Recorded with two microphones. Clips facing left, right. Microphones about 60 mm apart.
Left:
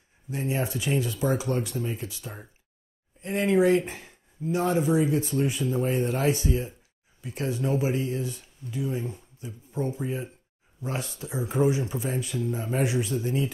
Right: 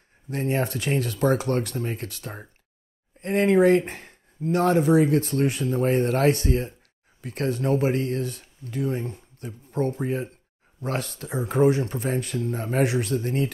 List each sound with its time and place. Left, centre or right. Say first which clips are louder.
0.3 s speech: right 3 dB; right